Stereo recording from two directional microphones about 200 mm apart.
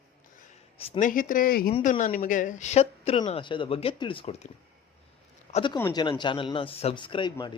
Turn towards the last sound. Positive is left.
turn(degrees=20)  # may be behind; listen again after turning